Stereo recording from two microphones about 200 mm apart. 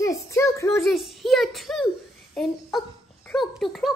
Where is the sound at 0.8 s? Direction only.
Centre (ahead or behind).